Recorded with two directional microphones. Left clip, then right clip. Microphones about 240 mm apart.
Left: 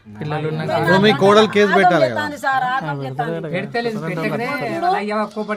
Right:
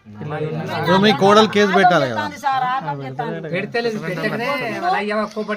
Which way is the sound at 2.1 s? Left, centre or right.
Centre.